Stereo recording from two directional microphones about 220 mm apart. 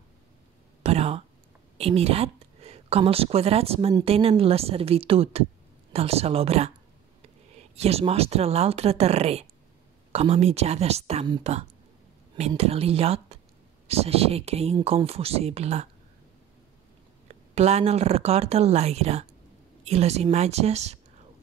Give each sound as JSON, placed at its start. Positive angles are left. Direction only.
{"t": 0.8, "sound": "a sound", "side_deg": -30}
{"t": 1.8, "sound": "a woman's voice", "side_deg": -25}
{"t": 17.3, "sound": "a woman's voice", "side_deg": -30}